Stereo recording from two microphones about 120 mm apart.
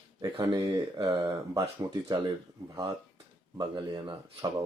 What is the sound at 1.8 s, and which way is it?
Speech, 35° right (ahead or behind).